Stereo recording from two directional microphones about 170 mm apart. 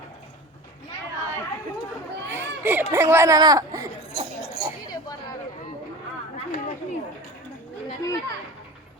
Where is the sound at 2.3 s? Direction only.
10° right (ahead or behind).